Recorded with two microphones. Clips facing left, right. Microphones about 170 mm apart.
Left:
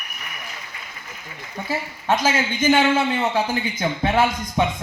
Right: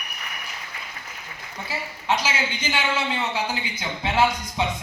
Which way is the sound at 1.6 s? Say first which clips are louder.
Left 4 dB; 50° left (ahead or behind).